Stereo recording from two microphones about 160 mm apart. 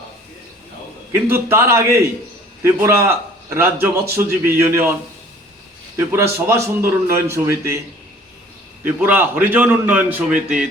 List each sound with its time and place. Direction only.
1.1 s a man's voice: 15° right (ahead or behind)
6.1 s a man's voice: 15° right (ahead or behind)
8.8 s a man's voice: 10° right (ahead or behind)